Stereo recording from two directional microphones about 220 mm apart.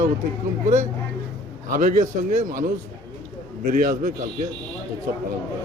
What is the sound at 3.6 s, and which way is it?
Speech, 40° right (ahead or behind).